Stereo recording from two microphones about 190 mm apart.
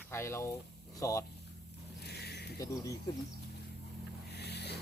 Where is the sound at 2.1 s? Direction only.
60° left (ahead or behind).